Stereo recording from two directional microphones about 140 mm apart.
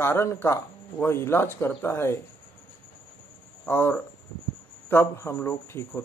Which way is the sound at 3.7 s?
15° left (ahead or behind).